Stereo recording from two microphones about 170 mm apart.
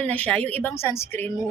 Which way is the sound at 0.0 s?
10° left (ahead or behind).